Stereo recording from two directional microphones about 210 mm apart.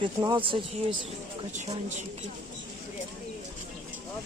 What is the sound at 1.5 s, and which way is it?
Speech, 35° right (ahead or behind).